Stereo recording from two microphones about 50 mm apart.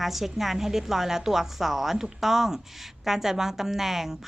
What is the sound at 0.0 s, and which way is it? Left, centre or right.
A woman's voice, centre.